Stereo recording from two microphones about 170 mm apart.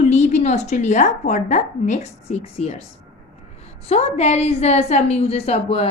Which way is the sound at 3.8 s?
40° left (ahead or behind).